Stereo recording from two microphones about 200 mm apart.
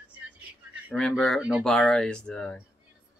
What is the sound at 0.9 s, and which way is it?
Speech, centre (ahead or behind).